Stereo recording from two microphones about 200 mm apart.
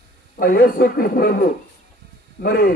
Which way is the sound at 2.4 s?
50° left (ahead or behind).